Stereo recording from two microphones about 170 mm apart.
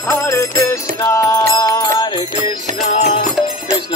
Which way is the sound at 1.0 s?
20° left (ahead or behind).